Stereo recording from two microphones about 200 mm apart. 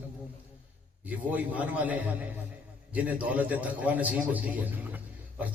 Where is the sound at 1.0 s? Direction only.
10° right (ahead or behind).